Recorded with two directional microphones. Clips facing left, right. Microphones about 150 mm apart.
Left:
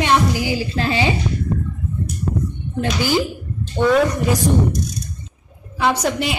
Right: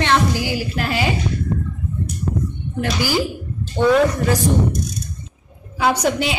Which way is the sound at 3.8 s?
5° right (ahead or behind).